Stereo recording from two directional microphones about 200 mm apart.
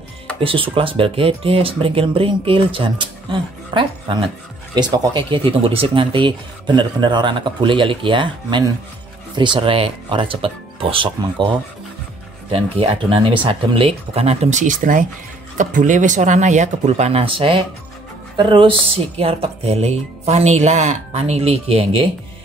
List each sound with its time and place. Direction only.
0.4 s speech: 25° right (ahead or behind)
12.4 s speech: 30° right (ahead or behind)